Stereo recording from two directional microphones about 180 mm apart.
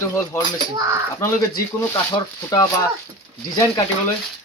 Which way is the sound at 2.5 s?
20° left (ahead or behind).